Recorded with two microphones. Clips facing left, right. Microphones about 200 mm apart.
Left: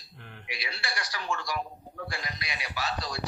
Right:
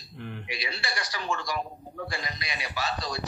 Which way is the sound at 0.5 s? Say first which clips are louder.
Left 1 dB; 10° left (ahead or behind).